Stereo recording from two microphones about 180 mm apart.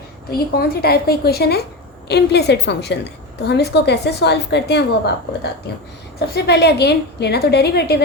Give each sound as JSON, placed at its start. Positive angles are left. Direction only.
{"t": 0.3, "sound": "a woman's voice", "side_deg": 60}
{"t": 6.1, "sound": "a woman's voice", "side_deg": 65}